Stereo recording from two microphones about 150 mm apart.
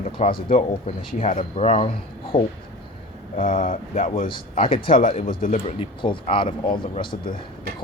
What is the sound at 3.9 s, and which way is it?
Speech, 40° left (ahead or behind).